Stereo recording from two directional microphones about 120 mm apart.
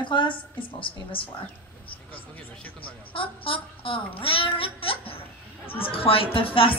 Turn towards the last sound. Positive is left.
turn(degrees=50)  # may be behind; listen again after turning